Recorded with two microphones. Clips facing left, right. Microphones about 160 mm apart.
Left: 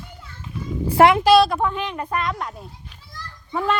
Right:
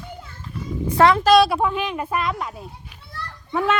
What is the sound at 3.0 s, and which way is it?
Children playing, 65° right (ahead or behind).